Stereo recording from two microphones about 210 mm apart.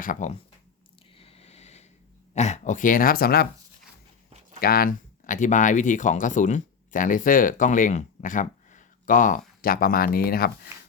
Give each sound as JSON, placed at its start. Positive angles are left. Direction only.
{"t": 0.0, "sound": "speech", "side_deg": 35}
{"t": 1.2, "sound": "a sound", "side_deg": 30}
{"t": 2.3, "sound": "speech", "side_deg": 35}
{"t": 4.6, "sound": "speech", "side_deg": 45}